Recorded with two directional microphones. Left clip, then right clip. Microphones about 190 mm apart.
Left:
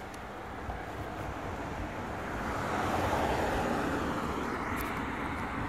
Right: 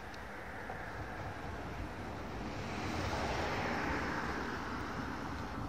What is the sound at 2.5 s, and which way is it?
Vehicle, 45° left (ahead or behind).